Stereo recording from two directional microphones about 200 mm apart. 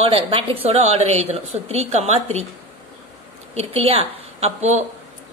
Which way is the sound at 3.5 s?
30° right (ahead or behind).